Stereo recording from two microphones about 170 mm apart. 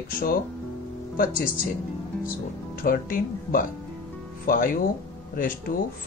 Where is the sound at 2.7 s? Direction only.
60° left (ahead or behind).